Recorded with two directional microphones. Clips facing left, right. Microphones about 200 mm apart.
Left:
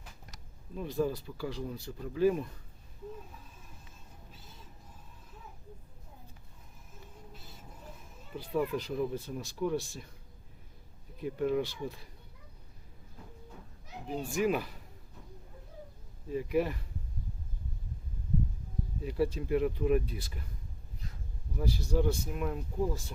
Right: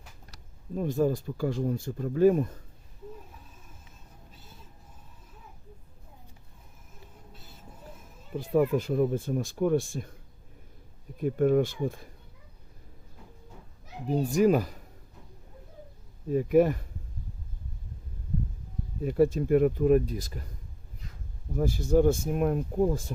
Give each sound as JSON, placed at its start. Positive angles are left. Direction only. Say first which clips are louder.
{"t": 0.8, "sound": "speech", "louder": "right 6 dB", "side_deg": -45}
{"t": 8.4, "sound": "speech", "louder": "right 7 dB", "side_deg": -50}
{"t": 11.2, "sound": "speech", "louder": "right 7 dB", "side_deg": -50}
{"t": 14.1, "sound": "a child's voice", "louder": "right 8 dB", "side_deg": -40}
{"t": 16.3, "sound": "speech", "louder": "right 8 dB", "side_deg": -50}
{"t": 19.0, "sound": "speech", "louder": "right 8 dB", "side_deg": -50}
{"t": 21.5, "sound": "speech", "louder": "right 8 dB", "side_deg": -50}